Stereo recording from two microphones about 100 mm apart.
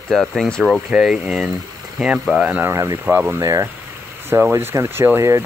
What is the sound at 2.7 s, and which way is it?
Speech, 30° right (ahead or behind).